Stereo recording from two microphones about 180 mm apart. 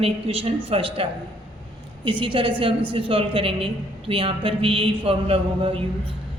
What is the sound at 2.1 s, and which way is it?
A woman's voice, 25° right (ahead or behind).